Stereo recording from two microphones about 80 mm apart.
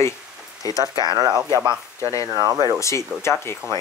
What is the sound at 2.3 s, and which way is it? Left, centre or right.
Speech, right.